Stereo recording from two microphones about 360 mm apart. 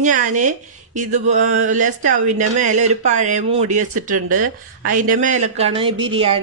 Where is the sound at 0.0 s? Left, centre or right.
Right.